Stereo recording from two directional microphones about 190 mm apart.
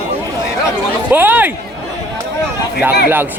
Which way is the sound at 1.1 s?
10° right (ahead or behind).